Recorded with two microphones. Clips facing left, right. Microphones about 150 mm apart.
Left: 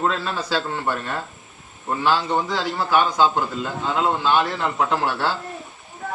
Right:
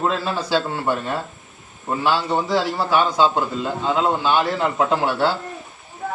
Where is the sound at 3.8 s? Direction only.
15° right (ahead or behind).